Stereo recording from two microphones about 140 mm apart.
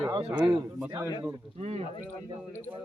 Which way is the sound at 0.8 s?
10° right (ahead or behind).